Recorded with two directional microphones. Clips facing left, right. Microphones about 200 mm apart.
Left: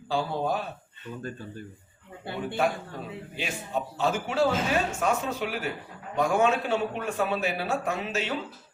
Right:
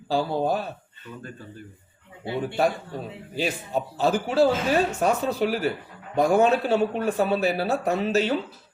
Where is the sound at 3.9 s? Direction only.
35° right (ahead or behind).